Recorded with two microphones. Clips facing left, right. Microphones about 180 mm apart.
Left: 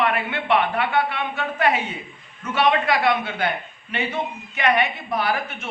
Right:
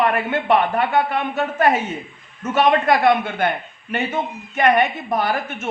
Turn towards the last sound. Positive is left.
turn(degrees=-45)  # may be behind; listen again after turning